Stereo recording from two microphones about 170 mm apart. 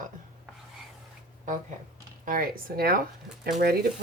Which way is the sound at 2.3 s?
60° right (ahead or behind).